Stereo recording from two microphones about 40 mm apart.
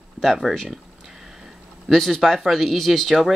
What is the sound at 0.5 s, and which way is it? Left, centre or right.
Speech, centre.